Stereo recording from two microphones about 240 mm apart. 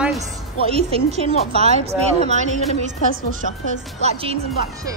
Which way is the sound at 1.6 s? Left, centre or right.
Right.